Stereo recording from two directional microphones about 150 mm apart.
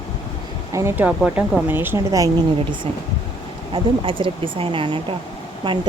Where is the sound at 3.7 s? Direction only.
35° right (ahead or behind).